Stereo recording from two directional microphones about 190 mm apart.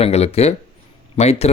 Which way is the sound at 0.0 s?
30° left (ahead or behind).